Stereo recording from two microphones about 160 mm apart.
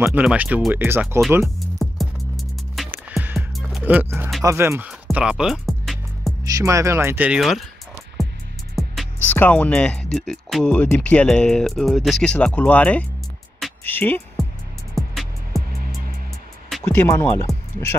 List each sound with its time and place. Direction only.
0.0 s speech: 10° right (ahead or behind)
1.8 s music: centre (ahead or behind)
2.9 s music: 10° right (ahead or behind)
3.8 s speech: 10° right (ahead or behind)
5.0 s music: 5° right (ahead or behind)
6.5 s speech: 20° right (ahead or behind); by 7.6 s centre (ahead or behind)
8.2 s music: centre (ahead or behind)
9.4 s speech: 10° left (ahead or behind)
15.0 s music: centre (ahead or behind)
16.6 s music: centre (ahead or behind)
16.9 s speech: 10° left (ahead or behind)